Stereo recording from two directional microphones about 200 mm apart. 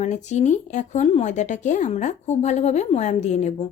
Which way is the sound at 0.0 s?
35° left (ahead or behind).